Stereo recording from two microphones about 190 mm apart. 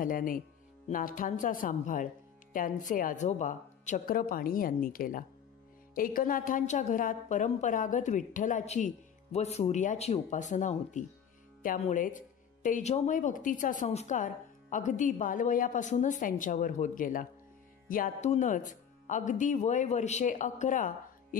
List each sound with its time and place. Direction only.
0.0 s a woman's voice: 45° left (ahead or behind)